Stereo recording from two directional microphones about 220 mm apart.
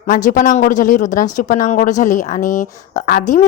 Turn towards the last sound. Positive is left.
turn(degrees=35)  # may be behind; listen again after turning